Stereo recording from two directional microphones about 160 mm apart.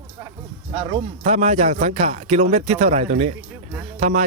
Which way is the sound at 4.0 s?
50° right (ahead or behind).